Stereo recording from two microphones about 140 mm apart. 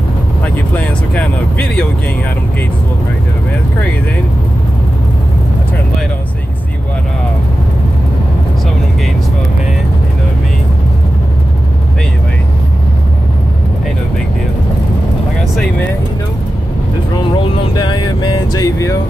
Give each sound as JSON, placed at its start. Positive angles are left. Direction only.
{"t": 0.7, "sound": "vehicle", "side_deg": 10}
{"t": 17.7, "sound": "vehicle", "side_deg": 30}